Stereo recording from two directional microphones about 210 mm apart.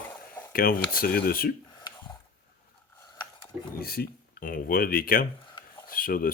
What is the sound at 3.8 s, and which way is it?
Speech, 45° left (ahead or behind).